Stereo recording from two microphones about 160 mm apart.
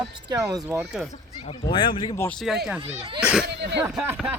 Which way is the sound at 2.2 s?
10° left (ahead or behind).